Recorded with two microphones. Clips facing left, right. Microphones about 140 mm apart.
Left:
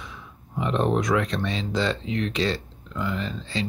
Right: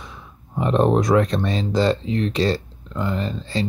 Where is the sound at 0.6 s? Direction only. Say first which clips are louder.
Right 5 dB; 40° right (ahead or behind).